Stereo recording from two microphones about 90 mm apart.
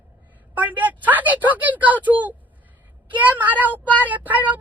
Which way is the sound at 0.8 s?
20° right (ahead or behind).